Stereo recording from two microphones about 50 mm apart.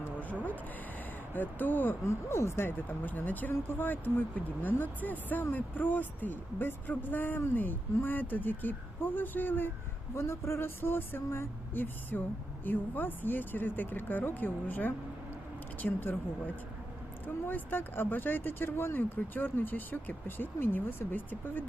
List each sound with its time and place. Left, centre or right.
1.3 s speech: left
2.0 s a sound: left
2.6 s speech: left
10.2 s a sound: left
11.7 s speech: left
17.2 s speech: left